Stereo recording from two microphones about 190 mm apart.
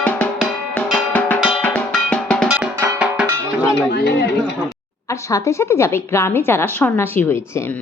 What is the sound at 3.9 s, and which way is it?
Speech, 60° left (ahead or behind).